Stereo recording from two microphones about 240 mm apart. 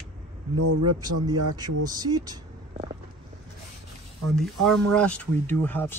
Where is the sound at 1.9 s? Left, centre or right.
Centre.